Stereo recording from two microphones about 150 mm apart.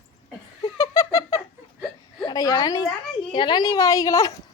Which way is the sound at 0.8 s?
25° left (ahead or behind).